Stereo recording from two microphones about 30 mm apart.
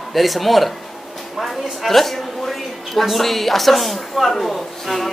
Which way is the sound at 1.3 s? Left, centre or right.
Centre.